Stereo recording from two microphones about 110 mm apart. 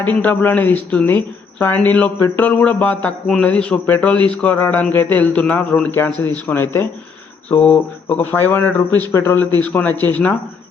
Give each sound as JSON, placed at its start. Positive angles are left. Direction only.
{"t": 0.0, "sound": "a man's voice", "side_deg": 15}